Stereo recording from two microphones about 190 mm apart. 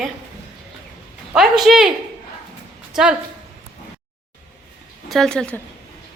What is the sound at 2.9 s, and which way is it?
Speech, 5° right (ahead or behind).